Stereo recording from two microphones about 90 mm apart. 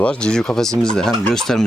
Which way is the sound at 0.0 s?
10° left (ahead or behind).